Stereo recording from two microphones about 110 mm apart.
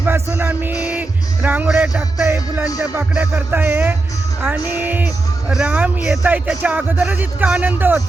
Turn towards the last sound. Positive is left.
turn(degrees=-20)  # may be behind; listen again after turning